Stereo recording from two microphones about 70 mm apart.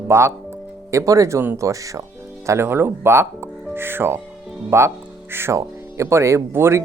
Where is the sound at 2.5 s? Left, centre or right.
Right.